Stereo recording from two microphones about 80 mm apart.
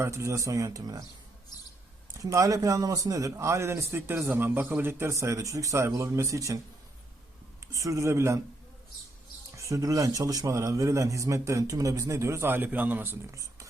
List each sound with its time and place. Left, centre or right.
0.0 s a man's voice: right
2.3 s a man's voice: right
7.7 s a man's voice: right
9.6 s a man's voice: right
13.3 s a sound: right